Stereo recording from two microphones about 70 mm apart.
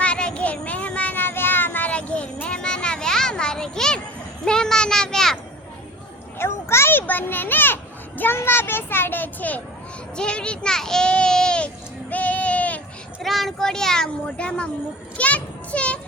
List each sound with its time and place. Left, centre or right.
0.0 s child singing: centre
4.4 s a sound: centre
6.4 s children playing: left
8.2 s a child's voice: left
10.2 s a child's voice: centre
12.1 s a sound: left
13.2 s a child's voice: centre